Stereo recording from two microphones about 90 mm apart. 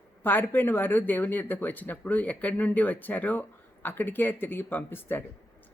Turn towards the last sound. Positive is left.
turn(degrees=25)  # may be behind; listen again after turning